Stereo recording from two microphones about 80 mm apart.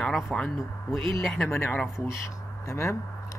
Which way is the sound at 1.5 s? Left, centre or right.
Left.